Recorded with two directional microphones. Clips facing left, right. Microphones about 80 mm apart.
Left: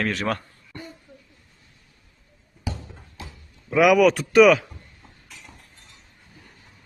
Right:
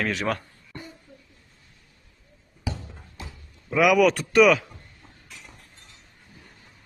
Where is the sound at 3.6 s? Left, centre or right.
Centre.